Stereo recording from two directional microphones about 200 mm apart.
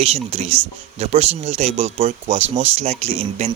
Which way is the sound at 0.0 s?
30° right (ahead or behind).